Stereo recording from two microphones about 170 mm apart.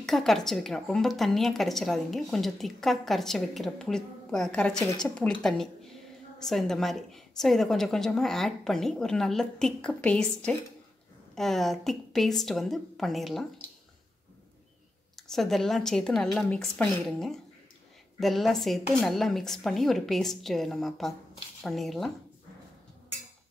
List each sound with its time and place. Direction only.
0.0 s a woman's voice: centre (ahead or behind)
15.1 s a woman's voice: centre (ahead or behind)